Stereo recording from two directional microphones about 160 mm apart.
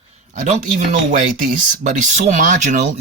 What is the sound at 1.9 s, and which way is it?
Speech, 50° right (ahead or behind).